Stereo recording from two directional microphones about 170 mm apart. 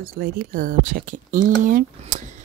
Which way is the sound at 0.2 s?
55° right (ahead or behind).